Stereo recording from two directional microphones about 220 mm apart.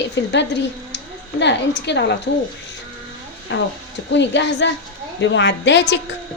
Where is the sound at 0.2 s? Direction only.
55° left (ahead or behind).